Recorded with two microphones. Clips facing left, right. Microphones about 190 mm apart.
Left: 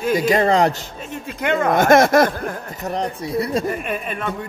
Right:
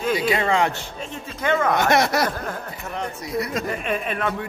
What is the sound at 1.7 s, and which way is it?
Speech, 50° left (ahead or behind).